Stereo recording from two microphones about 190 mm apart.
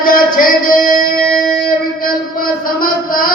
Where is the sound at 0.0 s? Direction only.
45° left (ahead or behind).